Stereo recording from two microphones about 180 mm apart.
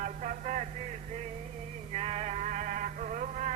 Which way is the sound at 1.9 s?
35° right (ahead or behind).